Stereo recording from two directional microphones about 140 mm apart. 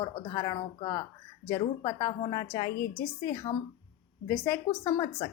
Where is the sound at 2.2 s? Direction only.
35° left (ahead or behind).